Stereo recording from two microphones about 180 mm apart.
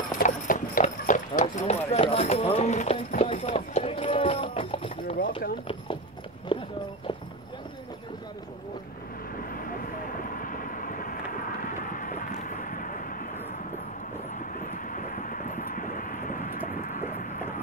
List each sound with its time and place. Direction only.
0.1 s clip-clop: 50° left (ahead or behind); by 4.9 s 30° left (ahead or behind)
6.5 s clip-clop: 25° left (ahead or behind)
9.5 s vehicle: 50° left (ahead or behind)
14.4 s vehicle: 50° left (ahead or behind)